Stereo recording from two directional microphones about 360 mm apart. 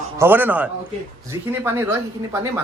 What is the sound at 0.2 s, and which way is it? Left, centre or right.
Speech, centre.